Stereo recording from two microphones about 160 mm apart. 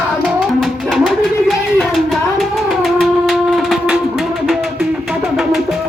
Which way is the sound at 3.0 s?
Centre (ahead or behind).